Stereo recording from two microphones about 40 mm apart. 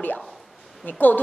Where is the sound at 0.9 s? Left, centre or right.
Left.